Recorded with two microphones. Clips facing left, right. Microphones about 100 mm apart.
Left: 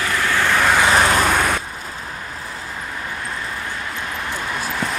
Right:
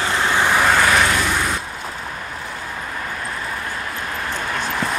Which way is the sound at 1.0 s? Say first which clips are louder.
Left 3 dB; 50° left (ahead or behind).